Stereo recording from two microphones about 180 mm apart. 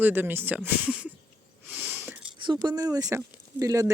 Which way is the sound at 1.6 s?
10° right (ahead or behind).